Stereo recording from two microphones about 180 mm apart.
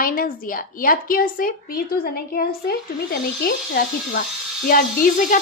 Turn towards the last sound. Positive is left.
turn(degrees=50)  # may be behind; listen again after turning